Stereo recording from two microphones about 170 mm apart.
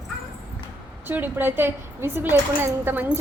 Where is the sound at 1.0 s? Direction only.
10° right (ahead or behind).